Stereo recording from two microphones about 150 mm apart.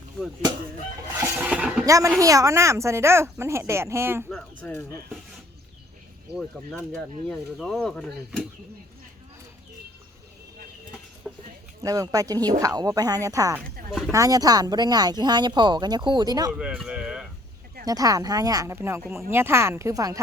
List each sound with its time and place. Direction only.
1.2 s a sound: 10° right (ahead or behind)
1.9 s a woman's voice: 20° right (ahead or behind)
4.3 s speech: 5° left (ahead or behind)
7.3 s speech: 5° left (ahead or behind)
11.3 s a sound: centre (ahead or behind)
11.8 s a woman's voice: 25° right (ahead or behind)
16.5 s speech: 5° right (ahead or behind)
17.8 s a woman's voice: 25° right (ahead or behind)